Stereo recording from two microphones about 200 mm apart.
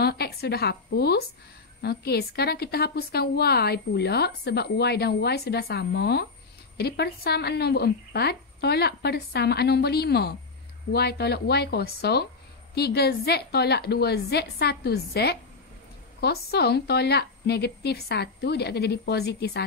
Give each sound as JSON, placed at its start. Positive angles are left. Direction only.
{"t": 0.0, "sound": "a woman's voice", "side_deg": 50}